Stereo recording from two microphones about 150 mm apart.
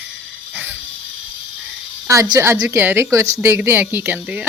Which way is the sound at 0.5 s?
15° right (ahead or behind).